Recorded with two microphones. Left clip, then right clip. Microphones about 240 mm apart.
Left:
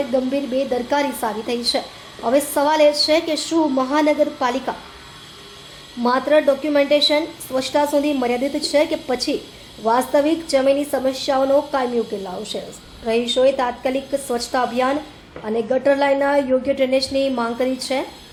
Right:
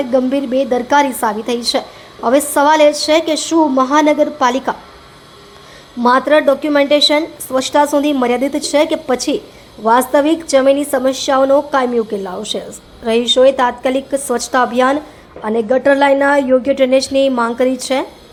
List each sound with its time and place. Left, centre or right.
0.1 s a woman's voice: right
6.0 s a woman's voice: right